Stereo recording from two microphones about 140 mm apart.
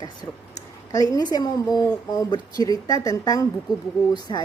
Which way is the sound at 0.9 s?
25° left (ahead or behind).